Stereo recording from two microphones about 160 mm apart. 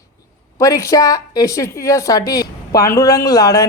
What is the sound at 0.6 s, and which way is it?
Speech, 20° left (ahead or behind).